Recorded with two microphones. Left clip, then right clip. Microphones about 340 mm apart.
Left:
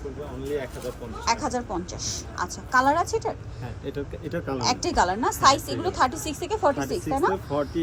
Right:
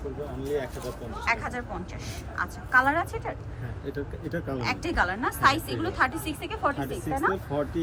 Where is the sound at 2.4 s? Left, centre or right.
Centre.